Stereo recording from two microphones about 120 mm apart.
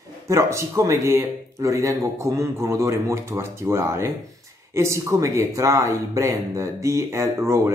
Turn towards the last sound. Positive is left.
turn(degrees=-25)  # may be behind; listen again after turning